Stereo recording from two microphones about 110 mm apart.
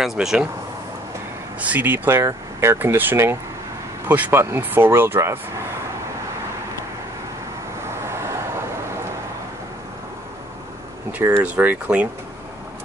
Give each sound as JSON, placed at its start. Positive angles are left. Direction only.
{"t": 0.0, "sound": "speech", "side_deg": -5}
{"t": 1.6, "sound": "speech", "side_deg": -15}
{"t": 7.9, "sound": "vehicle", "side_deg": -25}
{"t": 11.1, "sound": "speech", "side_deg": -15}